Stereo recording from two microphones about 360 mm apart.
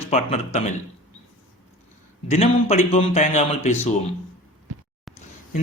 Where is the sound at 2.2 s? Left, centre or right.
Centre.